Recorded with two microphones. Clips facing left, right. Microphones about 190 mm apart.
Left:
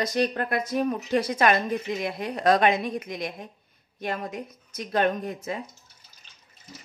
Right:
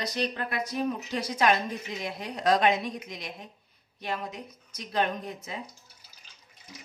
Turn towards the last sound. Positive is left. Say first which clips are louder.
# left 5 dB
turn(degrees=55)  # may be behind; listen again after turning